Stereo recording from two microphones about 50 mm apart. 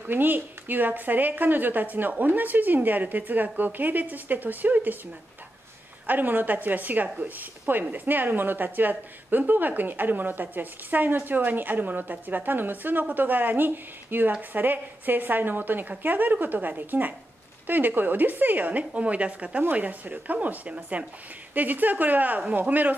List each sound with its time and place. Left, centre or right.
0.1 s a woman's voice: right
6.0 s a woman's voice: right